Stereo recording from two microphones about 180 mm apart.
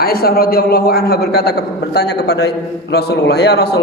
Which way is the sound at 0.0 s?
55° left (ahead or behind).